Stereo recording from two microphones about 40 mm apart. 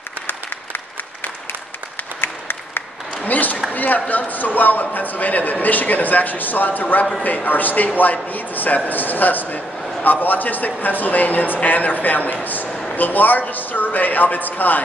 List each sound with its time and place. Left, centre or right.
0.3 s applause: left
3.3 s a sound: left
3.7 s a man's voice: left